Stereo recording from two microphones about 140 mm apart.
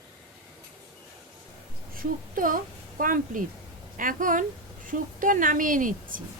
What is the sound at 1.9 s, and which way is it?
A woman's voice, 85° right.